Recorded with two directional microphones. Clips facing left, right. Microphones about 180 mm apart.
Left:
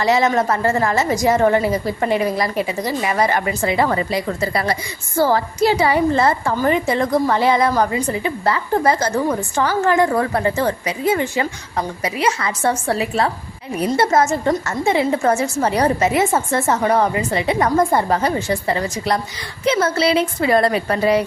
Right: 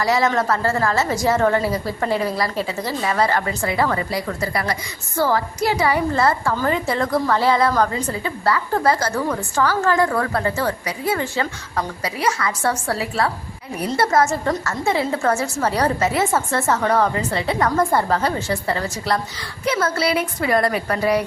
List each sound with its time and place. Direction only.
0.0 s a woman's voice: 20° left (ahead or behind)